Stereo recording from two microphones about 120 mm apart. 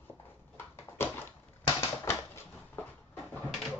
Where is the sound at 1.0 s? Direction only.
20° left (ahead or behind).